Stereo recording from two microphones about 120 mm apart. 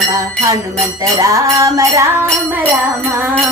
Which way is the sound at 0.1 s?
25° right (ahead or behind).